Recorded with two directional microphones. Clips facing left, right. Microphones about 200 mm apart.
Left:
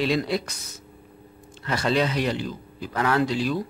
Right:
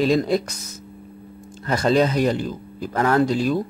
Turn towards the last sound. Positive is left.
turn(degrees=-45)  # may be behind; listen again after turning